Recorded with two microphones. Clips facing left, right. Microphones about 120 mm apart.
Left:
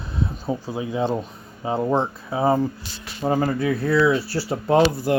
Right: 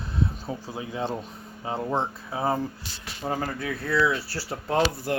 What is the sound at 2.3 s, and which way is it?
Speech, 15° left (ahead or behind).